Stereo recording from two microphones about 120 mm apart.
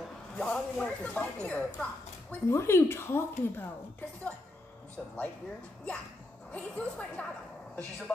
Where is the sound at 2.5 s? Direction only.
20° left (ahead or behind).